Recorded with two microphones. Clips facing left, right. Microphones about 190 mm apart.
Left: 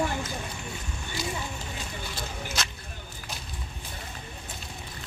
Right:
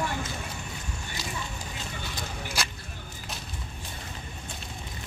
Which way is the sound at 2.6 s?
10° right (ahead or behind).